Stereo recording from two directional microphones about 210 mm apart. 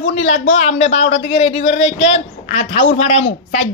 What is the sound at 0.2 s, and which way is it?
A man's voice, 30° left (ahead or behind).